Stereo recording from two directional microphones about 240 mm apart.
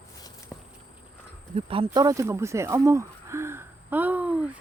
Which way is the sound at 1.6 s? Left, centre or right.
Right.